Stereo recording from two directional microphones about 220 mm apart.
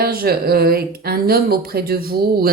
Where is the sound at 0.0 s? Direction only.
45° right (ahead or behind).